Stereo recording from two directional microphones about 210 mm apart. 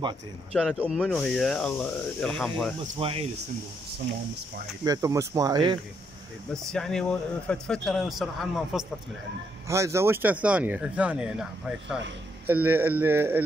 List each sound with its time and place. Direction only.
0.5 s speech: 5° right (ahead or behind)
3.0 s speech: 25° right (ahead or behind)
4.8 s speech: 15° right (ahead or behind)
6.7 s speech: 5° left (ahead or behind)
9.7 s speech: 15° right (ahead or behind)
12.4 s speech: 10° right (ahead or behind)